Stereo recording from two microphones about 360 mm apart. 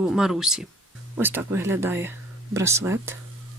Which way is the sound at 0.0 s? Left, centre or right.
Centre.